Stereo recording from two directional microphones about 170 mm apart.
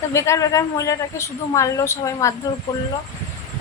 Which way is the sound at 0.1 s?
15° left (ahead or behind).